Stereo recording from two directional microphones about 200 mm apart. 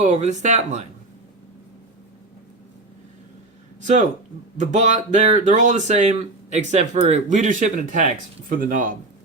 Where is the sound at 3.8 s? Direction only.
35° right (ahead or behind).